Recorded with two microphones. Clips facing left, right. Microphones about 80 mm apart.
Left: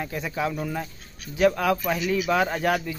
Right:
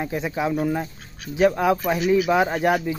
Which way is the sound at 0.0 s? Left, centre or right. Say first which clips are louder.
Right 3 dB; right.